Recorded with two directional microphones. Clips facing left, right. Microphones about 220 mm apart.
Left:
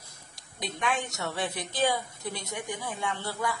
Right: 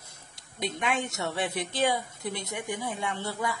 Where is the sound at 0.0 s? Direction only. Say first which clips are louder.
Even; 25° right (ahead or behind).